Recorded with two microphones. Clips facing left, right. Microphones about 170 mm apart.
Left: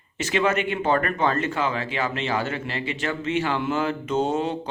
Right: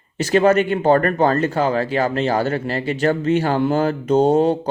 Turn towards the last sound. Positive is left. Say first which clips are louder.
# right 9 dB
turn(degrees=-40)  # may be behind; listen again after turning